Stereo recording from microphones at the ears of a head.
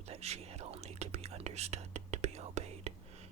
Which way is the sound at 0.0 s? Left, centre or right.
Right.